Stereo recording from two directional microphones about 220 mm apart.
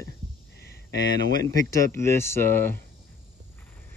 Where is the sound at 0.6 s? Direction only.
50° left (ahead or behind).